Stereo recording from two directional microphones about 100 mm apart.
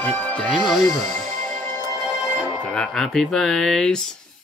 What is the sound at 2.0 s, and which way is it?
Music, centre (ahead or behind).